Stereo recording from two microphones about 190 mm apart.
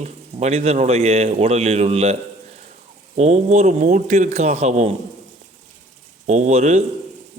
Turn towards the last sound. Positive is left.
turn(degrees=-35)  # may be behind; listen again after turning